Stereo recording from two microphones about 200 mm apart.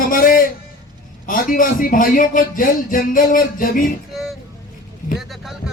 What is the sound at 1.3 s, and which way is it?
A man's voice, 45° left (ahead or behind).